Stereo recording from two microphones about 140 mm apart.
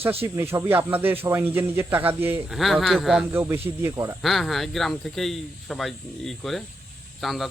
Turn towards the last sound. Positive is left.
turn(degrees=0)  # may be behind; listen again after turning